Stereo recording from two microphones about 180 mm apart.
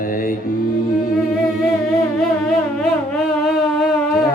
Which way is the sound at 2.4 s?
5° left (ahead or behind).